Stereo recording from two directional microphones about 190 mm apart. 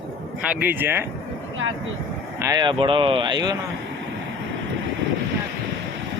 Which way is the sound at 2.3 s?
20° right (ahead or behind).